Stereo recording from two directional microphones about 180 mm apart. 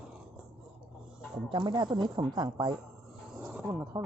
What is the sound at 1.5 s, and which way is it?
Speech, 25° right (ahead or behind).